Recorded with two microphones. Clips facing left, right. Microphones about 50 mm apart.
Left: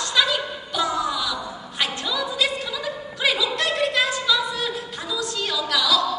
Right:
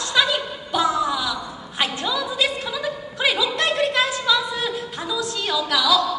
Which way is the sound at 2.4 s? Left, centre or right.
Centre.